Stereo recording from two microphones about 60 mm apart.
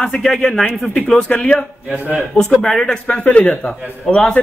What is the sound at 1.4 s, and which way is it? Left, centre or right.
A man's voice, centre.